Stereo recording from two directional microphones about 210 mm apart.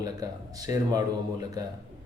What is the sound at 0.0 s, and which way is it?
Speech, 15° right (ahead or behind).